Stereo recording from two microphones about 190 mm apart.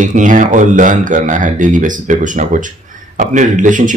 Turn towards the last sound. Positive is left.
turn(degrees=-40)  # may be behind; listen again after turning